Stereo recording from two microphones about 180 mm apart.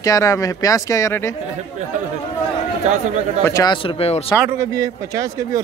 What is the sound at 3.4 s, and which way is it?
Speech, 20° left (ahead or behind).